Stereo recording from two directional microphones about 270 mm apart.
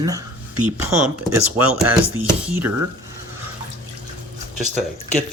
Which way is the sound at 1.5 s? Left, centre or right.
Centre.